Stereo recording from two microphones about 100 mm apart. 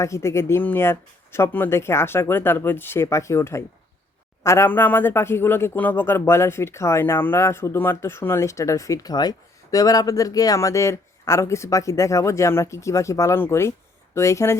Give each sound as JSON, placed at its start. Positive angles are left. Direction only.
{"t": 0.0, "sound": "a man's voice", "side_deg": 30}